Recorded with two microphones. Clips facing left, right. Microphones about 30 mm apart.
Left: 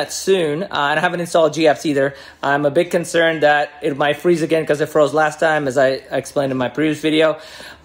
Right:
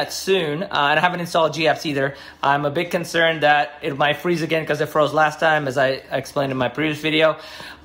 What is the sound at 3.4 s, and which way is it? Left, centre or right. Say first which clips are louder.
Speech: left 2 dB; centre.